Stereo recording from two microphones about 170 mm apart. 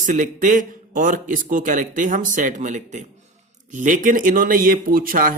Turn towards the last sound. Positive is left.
turn(degrees=-55)  # may be behind; listen again after turning